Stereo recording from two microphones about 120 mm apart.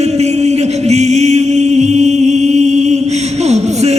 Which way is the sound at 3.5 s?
65° right (ahead or behind).